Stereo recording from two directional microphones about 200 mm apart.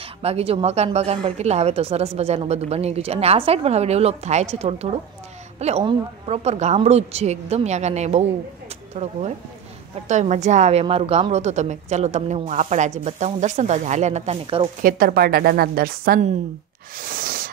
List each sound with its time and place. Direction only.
0.0 s speech: 30° right (ahead or behind)
14.8 s a woman's voice: 45° right (ahead or behind)
16.9 s a sound: 45° right (ahead or behind)